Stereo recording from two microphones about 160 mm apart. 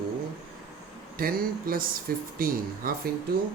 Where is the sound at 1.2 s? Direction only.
65° right (ahead or behind).